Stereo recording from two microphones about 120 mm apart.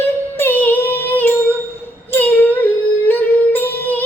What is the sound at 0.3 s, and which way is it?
Music, 15° left (ahead or behind).